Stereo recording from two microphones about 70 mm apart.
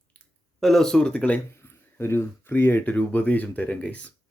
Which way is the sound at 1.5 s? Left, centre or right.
Left.